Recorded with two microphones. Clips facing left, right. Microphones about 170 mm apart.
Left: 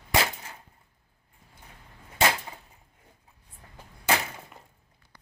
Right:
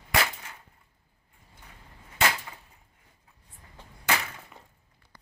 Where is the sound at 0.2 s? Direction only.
30° left (ahead or behind).